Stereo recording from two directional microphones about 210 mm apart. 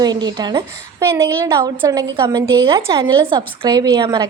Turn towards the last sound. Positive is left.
turn(degrees=-20)  # may be behind; listen again after turning